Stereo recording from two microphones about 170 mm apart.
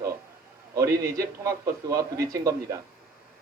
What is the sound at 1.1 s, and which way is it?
Speech, 20° right (ahead or behind).